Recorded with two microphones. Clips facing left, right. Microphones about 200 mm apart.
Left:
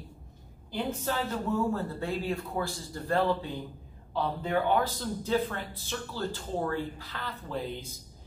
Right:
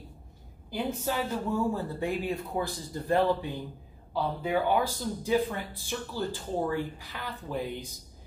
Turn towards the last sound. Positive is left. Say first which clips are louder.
# right 1 dB
turn(degrees=-15)  # may be behind; listen again after turning